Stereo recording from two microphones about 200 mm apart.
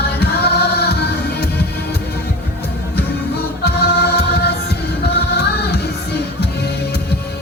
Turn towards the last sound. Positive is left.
turn(degrees=55)  # may be behind; listen again after turning